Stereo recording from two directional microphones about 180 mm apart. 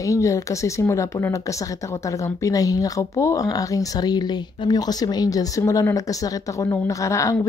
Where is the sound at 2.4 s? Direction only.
20° left (ahead or behind).